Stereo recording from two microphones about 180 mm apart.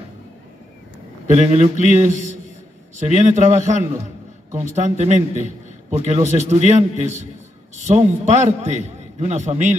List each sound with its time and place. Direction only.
1.2 s a man's voice: 40° right (ahead or behind)